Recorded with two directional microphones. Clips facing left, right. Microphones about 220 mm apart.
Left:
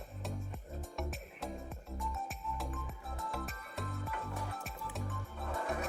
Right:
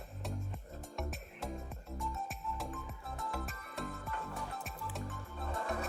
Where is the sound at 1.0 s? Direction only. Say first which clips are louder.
Even; centre (ahead or behind).